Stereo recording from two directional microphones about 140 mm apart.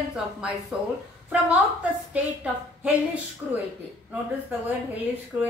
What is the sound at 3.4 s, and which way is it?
Speech, 15° right (ahead or behind).